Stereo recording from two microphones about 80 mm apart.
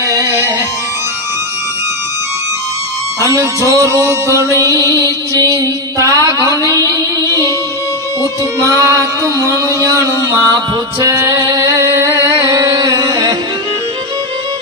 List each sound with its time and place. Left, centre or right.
0.1 s music: right
3.2 s music: right
4.6 s music: left
5.3 s music: right